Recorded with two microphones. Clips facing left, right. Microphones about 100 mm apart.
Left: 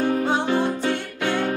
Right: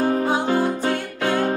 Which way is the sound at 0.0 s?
35° right (ahead or behind).